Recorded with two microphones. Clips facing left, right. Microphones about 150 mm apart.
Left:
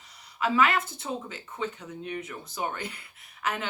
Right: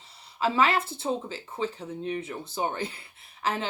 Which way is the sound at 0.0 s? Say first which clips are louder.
Right 2 dB; 30° right (ahead or behind).